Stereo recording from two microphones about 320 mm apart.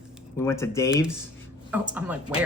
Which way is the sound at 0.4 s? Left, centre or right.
Centre.